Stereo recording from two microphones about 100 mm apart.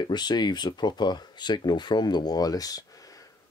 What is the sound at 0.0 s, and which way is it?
Speech, 45° left (ahead or behind).